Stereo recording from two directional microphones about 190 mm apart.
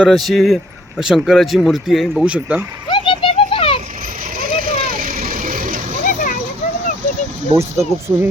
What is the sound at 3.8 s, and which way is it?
Vehicle, 40° right (ahead or behind).